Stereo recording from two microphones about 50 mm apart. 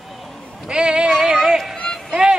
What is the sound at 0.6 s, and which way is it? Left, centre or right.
Speech, centre.